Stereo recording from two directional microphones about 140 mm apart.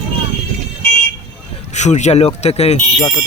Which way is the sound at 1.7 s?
55° left (ahead or behind).